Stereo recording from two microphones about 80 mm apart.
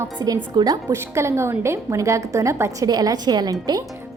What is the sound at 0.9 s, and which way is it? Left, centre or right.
A woman's voice, right.